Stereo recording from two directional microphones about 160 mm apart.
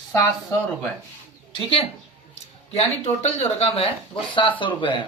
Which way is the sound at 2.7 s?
40° left (ahead or behind).